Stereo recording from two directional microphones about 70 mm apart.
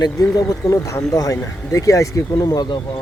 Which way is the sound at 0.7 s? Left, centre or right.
Left.